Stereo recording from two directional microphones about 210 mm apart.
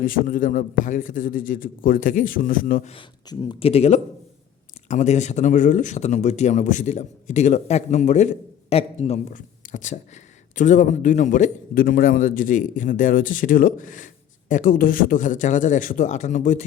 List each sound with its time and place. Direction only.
0.0 s speech: 40° left (ahead or behind)
2.9 s speech: 20° left (ahead or behind)